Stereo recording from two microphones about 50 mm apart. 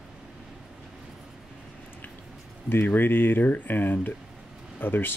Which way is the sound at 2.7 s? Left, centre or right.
Left.